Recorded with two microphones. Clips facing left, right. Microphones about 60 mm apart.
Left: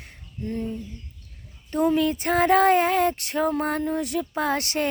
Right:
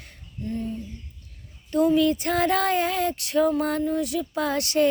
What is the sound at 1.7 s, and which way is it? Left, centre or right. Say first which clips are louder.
Speech: right 2 dB; left.